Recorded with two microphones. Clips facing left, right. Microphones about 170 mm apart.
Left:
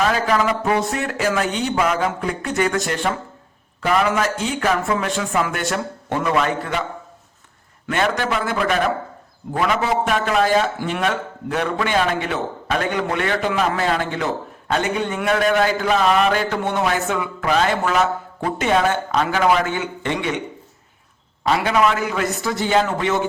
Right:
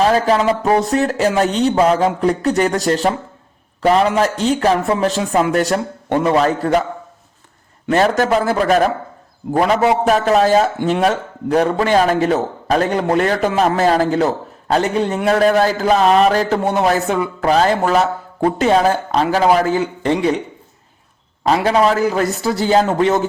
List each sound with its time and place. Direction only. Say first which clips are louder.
0.0 s a man's voice: right 5 dB; 30° right (ahead or behind)
7.9 s a man's voice: right 7 dB; 35° right (ahead or behind)
21.4 s a man's voice: right 4 dB; 35° right (ahead or behind)